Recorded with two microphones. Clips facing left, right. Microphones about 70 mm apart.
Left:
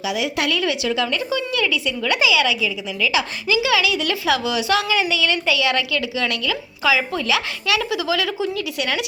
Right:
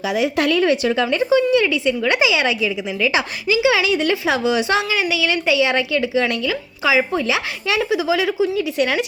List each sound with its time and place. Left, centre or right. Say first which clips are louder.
0.1 s a woman's voice: right 5 dB; right
4.9 s speech: even; centre